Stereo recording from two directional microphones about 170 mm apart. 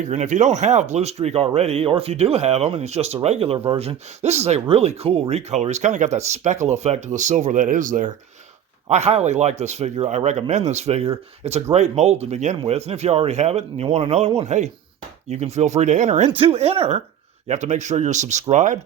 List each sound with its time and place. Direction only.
0.0 s speech: 45° right (ahead or behind)
8.9 s speech: 40° right (ahead or behind)